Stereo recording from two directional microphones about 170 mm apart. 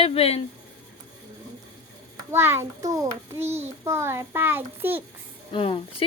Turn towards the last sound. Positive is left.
turn(degrees=35)  # may be behind; listen again after turning